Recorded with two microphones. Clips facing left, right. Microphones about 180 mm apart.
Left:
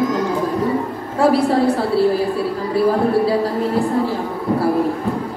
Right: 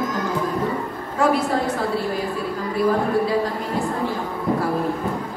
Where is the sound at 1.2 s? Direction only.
35° left (ahead or behind).